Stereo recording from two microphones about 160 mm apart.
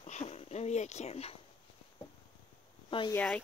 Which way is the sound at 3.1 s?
10° left (ahead or behind).